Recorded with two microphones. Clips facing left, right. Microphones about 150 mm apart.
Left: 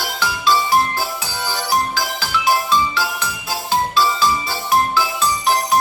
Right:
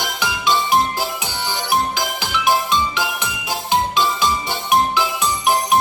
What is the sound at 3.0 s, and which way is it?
Jingle bell, 20° right (ahead or behind).